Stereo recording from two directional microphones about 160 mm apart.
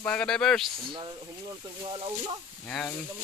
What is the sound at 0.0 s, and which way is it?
Speech, 5° left (ahead or behind).